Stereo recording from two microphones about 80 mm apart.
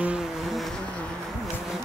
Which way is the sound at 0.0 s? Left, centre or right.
Centre.